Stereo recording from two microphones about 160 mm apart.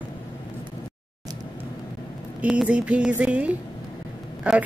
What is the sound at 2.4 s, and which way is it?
A woman's voice, 5° right (ahead or behind).